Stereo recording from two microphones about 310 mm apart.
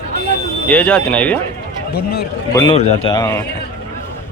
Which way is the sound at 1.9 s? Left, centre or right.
Left.